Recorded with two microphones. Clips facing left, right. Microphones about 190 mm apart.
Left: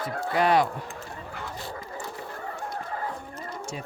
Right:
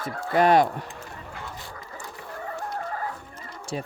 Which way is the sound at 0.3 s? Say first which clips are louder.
Right 4 dB; 50° right (ahead or behind).